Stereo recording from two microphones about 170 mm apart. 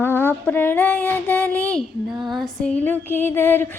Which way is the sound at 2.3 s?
Centre (ahead or behind).